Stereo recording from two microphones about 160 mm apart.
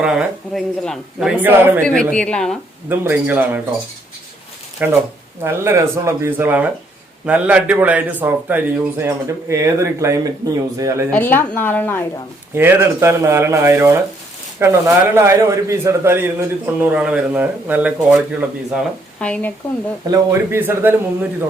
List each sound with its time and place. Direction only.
0.0 s a man's voice: 5° right (ahead or behind)
1.8 s a man's voice: 5° left (ahead or behind)
2.9 s a man's voice: 15° right (ahead or behind)
4.8 s a man's voice: 10° right (ahead or behind)
11.1 s a woman's voice: 10° left (ahead or behind)
12.5 s a man's voice: 15° right (ahead or behind)
19.2 s a woman's voice: 10° left (ahead or behind)
20.1 s a man's voice: 25° right (ahead or behind)
20.6 s a man's voice: 15° right (ahead or behind)